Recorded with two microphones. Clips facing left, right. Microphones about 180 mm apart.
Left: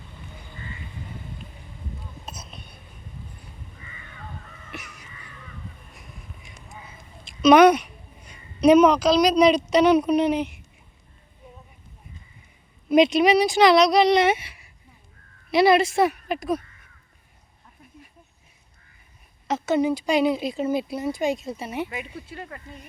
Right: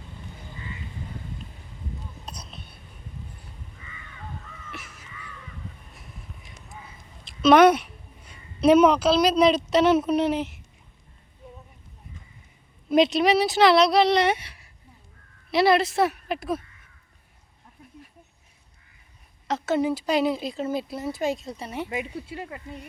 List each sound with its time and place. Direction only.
2.2 s a sound: 5° left (ahead or behind)
2.5 s a sound: 50° left (ahead or behind)
4.7 s crow: 15° left (ahead or behind)
7.4 s speech: centre (ahead or behind)
9.0 s speech: 5° right (ahead or behind)
12.9 s speech: centre (ahead or behind)
19.5 s speech: centre (ahead or behind)
21.8 s speech: 25° right (ahead or behind)